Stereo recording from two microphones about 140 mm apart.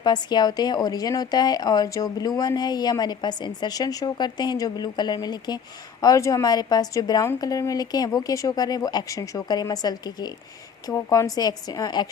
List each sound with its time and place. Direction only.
0.0 s speech: 30° left (ahead or behind)